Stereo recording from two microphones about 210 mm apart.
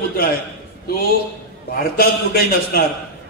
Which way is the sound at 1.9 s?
45° left (ahead or behind).